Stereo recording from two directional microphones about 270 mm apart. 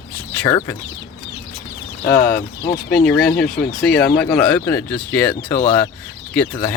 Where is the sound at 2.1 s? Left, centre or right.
Left.